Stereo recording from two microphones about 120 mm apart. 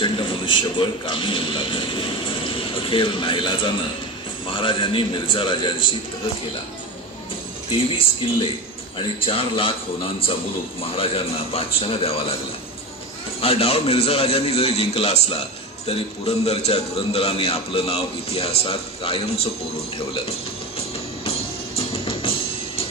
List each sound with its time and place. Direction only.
0.0 s a man's voice: 45° left (ahead or behind)
8.9 s a man's voice: 50° left (ahead or behind)
11.0 s a man's voice: 55° left (ahead or behind)
13.4 s a man's voice: 55° left (ahead or behind)
21.3 s music: 50° left (ahead or behind)